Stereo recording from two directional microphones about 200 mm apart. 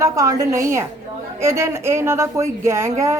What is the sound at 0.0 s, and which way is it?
Speech, 15° right (ahead or behind).